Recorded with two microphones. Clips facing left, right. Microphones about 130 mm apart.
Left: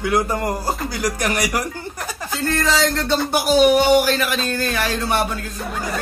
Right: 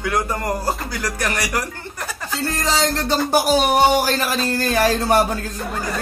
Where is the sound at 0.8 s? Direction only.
15° left (ahead or behind).